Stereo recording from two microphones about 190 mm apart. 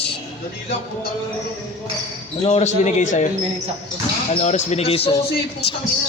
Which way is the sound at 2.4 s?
35° left (ahead or behind).